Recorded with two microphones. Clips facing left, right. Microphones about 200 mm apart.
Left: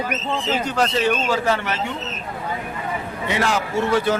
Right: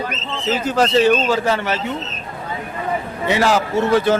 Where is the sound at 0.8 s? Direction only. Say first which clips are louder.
Right 7 dB; 30° right (ahead or behind).